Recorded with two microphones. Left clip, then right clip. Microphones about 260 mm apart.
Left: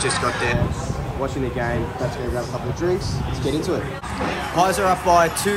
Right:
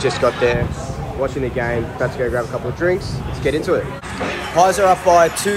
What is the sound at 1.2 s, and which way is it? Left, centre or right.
Speech, left.